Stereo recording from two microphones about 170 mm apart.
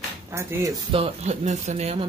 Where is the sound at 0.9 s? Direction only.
35° right (ahead or behind).